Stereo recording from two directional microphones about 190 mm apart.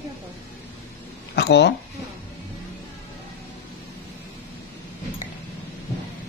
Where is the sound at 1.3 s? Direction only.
60° left (ahead or behind).